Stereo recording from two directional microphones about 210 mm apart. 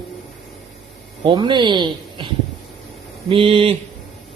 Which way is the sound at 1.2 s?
20° right (ahead or behind).